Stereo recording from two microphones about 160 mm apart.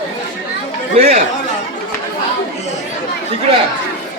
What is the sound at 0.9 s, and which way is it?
Speech, 45° right (ahead or behind).